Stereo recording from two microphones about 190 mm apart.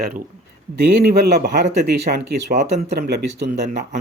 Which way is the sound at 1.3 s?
55° right (ahead or behind).